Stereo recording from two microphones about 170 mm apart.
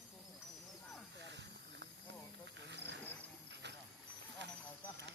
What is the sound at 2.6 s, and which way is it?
Wild animals, 90° right.